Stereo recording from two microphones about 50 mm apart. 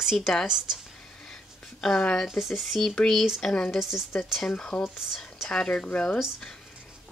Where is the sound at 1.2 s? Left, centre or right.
Centre.